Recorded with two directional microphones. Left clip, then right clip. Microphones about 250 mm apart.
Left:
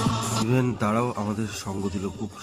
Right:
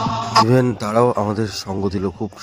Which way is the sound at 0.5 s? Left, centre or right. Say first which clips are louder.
Right 7 dB; centre.